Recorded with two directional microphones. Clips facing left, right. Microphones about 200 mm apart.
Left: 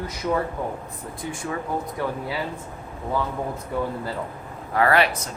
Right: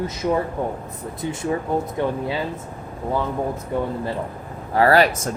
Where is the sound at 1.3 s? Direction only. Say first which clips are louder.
Right 6 dB; 25° right (ahead or behind).